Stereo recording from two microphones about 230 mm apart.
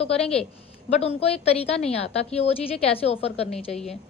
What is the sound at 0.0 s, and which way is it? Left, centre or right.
A woman's voice, left.